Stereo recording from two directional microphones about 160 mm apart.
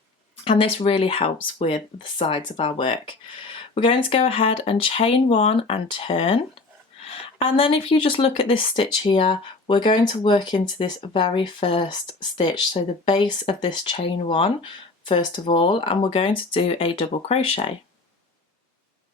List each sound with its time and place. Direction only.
0.4 s speech: 35° left (ahead or behind)